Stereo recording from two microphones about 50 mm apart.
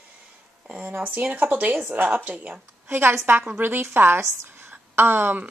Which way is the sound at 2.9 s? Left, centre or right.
Right.